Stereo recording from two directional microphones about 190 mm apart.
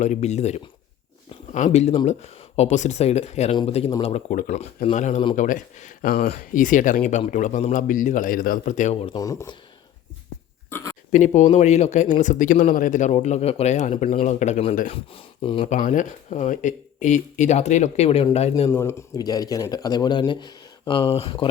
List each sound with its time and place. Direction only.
0.0 s speech: 35° left (ahead or behind)
9.2 s speech: 15° left (ahead or behind)
10.7 s a sound: 10° left (ahead or behind)
11.1 s speech: 40° left (ahead or behind)
15.1 s speech: 25° left (ahead or behind)
15.6 s speech: 40° left (ahead or behind)
18.7 s speech: 15° left (ahead or behind); by 21.4 s 30° left (ahead or behind)